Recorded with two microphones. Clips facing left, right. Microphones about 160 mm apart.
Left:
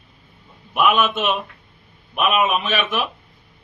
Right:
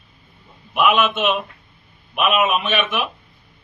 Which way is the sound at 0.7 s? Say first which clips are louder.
Right 1 dB; centre (ahead or behind).